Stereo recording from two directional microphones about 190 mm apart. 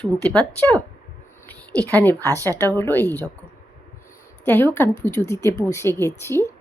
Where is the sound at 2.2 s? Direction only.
15° right (ahead or behind).